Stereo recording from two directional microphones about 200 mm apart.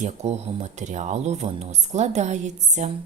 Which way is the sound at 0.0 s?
35° right (ahead or behind).